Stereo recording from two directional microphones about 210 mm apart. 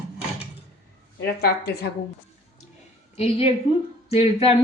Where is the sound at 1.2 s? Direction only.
50° left (ahead or behind).